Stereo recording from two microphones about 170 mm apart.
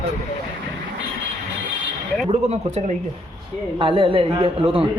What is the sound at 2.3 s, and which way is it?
A man's voice, 40° right (ahead or behind).